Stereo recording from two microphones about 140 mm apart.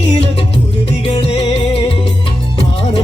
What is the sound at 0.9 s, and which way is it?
Music, 45° left (ahead or behind).